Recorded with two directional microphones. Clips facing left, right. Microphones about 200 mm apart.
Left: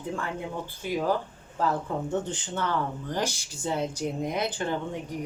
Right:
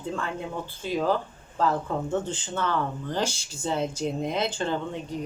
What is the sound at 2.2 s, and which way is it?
Speech, 15° left (ahead or behind).